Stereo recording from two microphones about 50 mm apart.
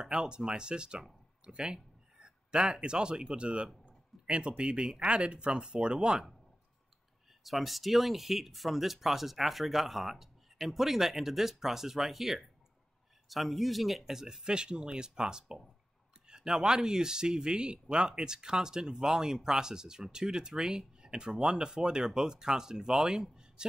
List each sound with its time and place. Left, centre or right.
0.0 s speech: centre
7.4 s speech: centre